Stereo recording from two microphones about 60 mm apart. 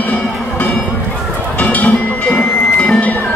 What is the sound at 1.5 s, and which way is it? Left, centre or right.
Music, left.